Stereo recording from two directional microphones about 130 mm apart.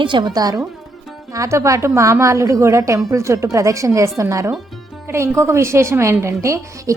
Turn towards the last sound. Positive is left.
turn(degrees=-20)  # may be behind; listen again after turning